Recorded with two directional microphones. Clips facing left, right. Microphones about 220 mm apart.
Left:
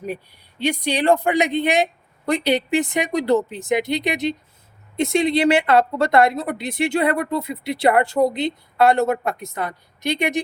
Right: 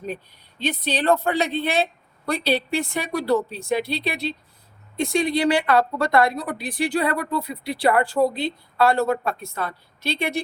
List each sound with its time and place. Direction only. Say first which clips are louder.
0.6 s a woman's voice: left 3 dB; 15° left (ahead or behind)